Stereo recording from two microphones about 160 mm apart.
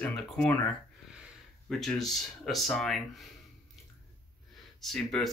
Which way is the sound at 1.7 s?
Centre (ahead or behind).